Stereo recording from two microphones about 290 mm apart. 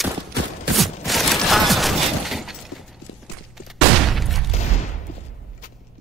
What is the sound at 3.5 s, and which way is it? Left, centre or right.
Fusillade, centre.